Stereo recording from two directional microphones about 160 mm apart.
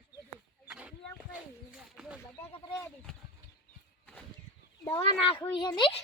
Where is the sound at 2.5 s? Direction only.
20° left (ahead or behind).